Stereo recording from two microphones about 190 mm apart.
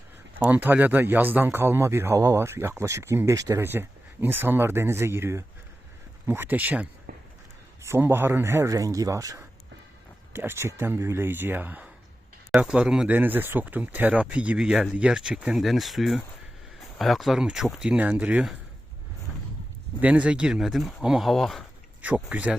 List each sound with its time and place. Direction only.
0.3 s a man's voice: 10° right (ahead or behind)
7.1 s a sound: 50° right (ahead or behind)
7.8 s a man's voice: 15° right (ahead or behind)
20.0 s a man's voice: 5° right (ahead or behind)